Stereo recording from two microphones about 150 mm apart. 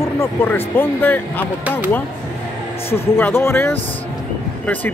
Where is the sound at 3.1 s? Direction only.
15° left (ahead or behind).